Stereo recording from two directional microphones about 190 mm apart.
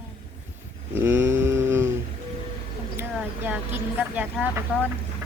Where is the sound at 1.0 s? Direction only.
10° right (ahead or behind).